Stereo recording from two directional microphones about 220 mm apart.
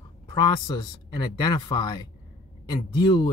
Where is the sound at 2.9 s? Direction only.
20° left (ahead or behind).